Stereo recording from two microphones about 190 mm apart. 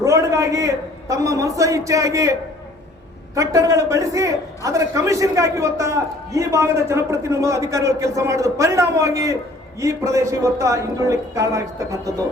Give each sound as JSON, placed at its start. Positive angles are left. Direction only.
{"t": 0.0, "sound": "a man's voice", "side_deg": -15}
{"t": 3.3, "sound": "a man's voice", "side_deg": -15}